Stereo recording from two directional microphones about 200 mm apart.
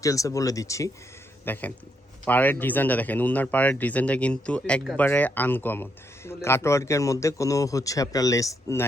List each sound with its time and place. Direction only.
0.0 s speech: 15° left (ahead or behind)